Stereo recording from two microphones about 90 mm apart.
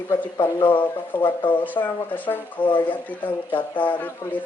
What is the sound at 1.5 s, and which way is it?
Speech, 20° left (ahead or behind).